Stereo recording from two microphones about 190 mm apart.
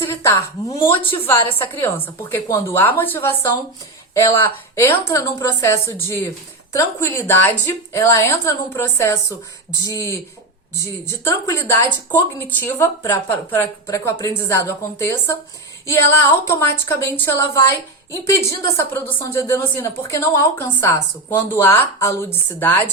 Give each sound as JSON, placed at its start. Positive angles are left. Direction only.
{"t": 0.0, "sound": "a woman's voice", "side_deg": 15}